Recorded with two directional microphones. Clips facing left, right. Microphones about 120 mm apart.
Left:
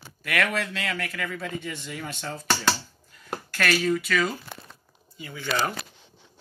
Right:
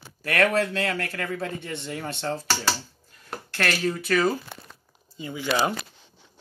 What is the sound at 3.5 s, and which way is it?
Speech, 30° right (ahead or behind).